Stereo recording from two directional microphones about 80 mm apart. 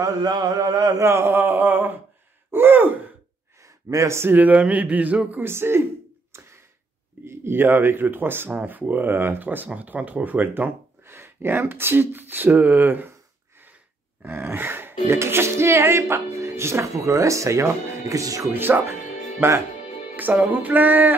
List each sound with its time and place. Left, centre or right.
0.0 s mantra: right
1.0 s speech: right
2.5 s gasp: right
3.6 s speech: right; by 5.4 s centre
5.4 s speech: right
6.3 s a sound: right
7.2 s speech: right
14.2 s speech: right
18.5 s speech: right